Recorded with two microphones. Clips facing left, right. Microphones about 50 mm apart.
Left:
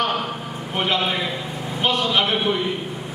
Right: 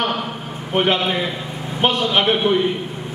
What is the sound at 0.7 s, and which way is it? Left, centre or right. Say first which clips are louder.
A man's voice: right 4 dB; right.